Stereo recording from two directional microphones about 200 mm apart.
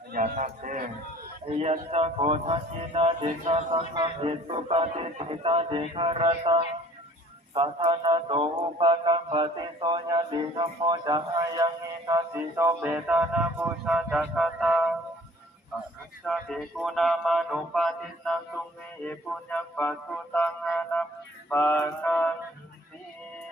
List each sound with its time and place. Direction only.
0.1 s a man's voice: 40° right (ahead or behind)
1.5 s mantra: 30° right (ahead or behind); by 14.8 s centre (ahead or behind)
15.7 s a sound: centre (ahead or behind)
19.5 s music: 10° left (ahead or behind)